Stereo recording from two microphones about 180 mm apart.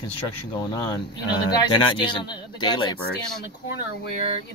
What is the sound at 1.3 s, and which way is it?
Speech, 25° left (ahead or behind).